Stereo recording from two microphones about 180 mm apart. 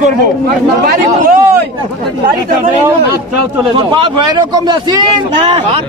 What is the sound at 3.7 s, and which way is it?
A man's voice, 25° right (ahead or behind).